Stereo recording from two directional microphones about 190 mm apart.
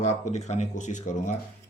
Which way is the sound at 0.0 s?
35° left (ahead or behind).